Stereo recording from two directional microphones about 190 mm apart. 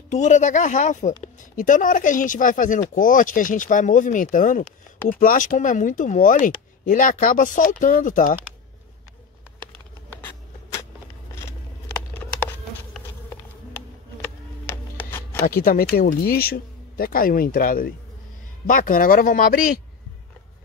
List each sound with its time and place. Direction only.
0.1 s speech: 40° left (ahead or behind)
11.3 s a sound: 15° left (ahead or behind)
14.7 s music: 10° left (ahead or behind)
15.4 s speech: 50° left (ahead or behind)